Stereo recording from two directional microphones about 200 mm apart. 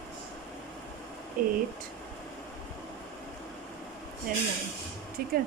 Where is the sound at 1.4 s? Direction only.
45° right (ahead or behind).